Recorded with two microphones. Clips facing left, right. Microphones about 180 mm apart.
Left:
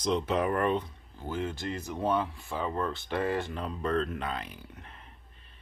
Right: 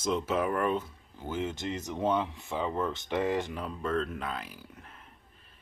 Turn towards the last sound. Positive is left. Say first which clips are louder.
# left 1 dB
turn(degrees=-5)  # may be behind; listen again after turning